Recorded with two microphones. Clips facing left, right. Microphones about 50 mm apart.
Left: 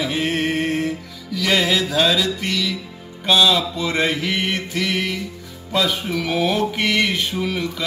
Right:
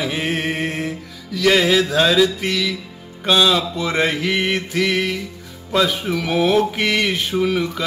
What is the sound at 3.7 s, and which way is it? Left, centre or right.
Speech, right.